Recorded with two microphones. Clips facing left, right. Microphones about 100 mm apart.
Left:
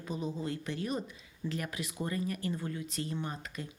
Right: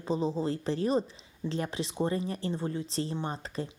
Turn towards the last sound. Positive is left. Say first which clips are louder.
# right 5 dB
turn(degrees=-30)  # may be behind; listen again after turning